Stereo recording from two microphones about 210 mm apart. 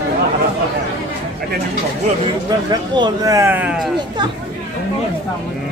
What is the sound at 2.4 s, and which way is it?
Speech, 20° right (ahead or behind).